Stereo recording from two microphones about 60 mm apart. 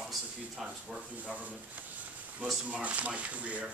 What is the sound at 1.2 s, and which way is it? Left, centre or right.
Speech, right.